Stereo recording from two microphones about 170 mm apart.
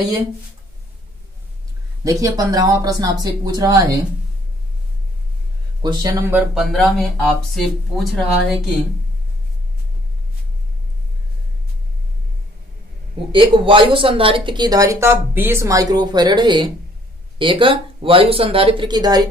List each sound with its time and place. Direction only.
2.0 s speech: 20° right (ahead or behind)
5.8 s speech: 25° right (ahead or behind)
6.3 s speech: centre (ahead or behind)
13.3 s speech: 30° right (ahead or behind)